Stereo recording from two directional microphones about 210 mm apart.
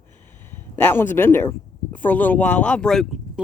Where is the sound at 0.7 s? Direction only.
10° left (ahead or behind).